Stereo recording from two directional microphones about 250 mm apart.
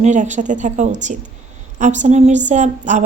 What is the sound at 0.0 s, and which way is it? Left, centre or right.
A woman's voice, right.